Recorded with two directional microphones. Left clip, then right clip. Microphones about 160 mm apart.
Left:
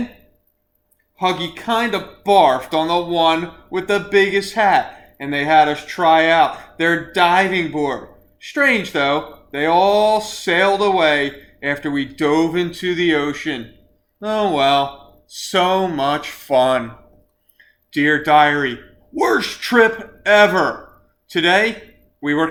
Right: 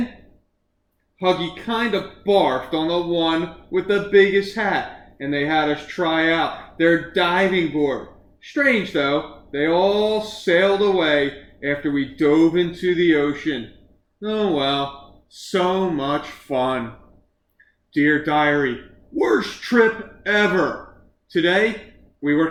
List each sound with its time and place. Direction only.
1.2 s speech: 20° left (ahead or behind)
17.9 s speech: 20° left (ahead or behind)